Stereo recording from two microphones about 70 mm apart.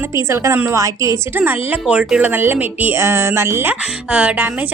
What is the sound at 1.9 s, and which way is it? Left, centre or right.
A woman's voice, centre.